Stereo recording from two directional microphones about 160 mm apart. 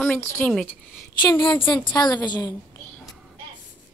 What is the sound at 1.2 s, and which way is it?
A woman's voice, 30° left (ahead or behind).